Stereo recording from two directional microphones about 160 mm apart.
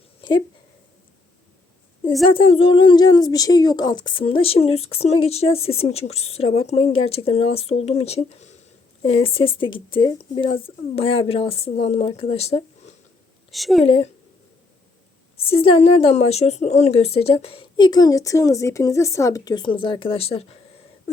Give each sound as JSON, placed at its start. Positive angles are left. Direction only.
{"t": 0.2, "sound": "a sound", "side_deg": 30}
{"t": 2.2, "sound": "a woman's voice", "side_deg": 35}
{"t": 13.5, "sound": "a woman's voice", "side_deg": 0}
{"t": 13.8, "sound": "a woman's voice", "side_deg": 35}
{"t": 15.4, "sound": "a woman's voice", "side_deg": 35}